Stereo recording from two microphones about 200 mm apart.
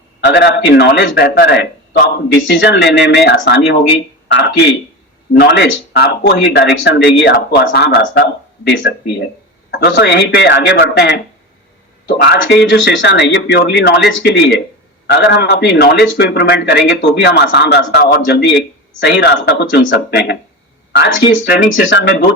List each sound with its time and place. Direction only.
0.3 s a man's voice: 60° left (ahead or behind)